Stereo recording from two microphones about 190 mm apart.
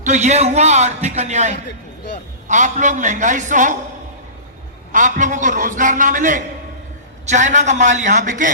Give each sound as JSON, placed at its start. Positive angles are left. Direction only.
{"t": 0.0, "sound": "a man's voice", "side_deg": -35}
{"t": 4.9, "sound": "a man's voice", "side_deg": -40}